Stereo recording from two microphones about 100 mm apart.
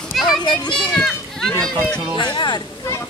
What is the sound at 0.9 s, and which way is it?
Children playing, centre (ahead or behind).